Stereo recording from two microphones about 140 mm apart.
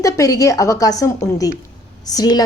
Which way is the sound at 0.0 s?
25° left (ahead or behind).